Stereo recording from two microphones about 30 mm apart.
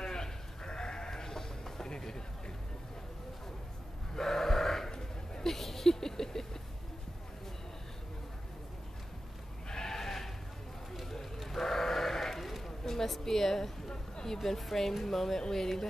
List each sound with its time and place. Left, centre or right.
0.0 s sheep: left
4.1 s sheep: centre
5.4 s a sound: centre
9.7 s sheep: centre
10.9 s run: centre
11.4 s sheep: centre
12.6 s a sound: centre
14.6 s speech: centre